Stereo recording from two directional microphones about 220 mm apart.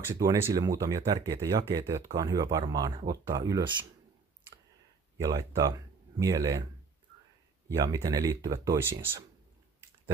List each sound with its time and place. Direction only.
0.1 s speech: 15° right (ahead or behind)
5.1 s speech: 15° right (ahead or behind)
7.6 s speech: 15° right (ahead or behind)